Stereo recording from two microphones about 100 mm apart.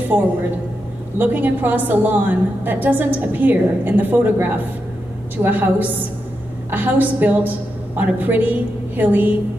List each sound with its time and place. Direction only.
1.1 s a woman's voice: 20° right (ahead or behind)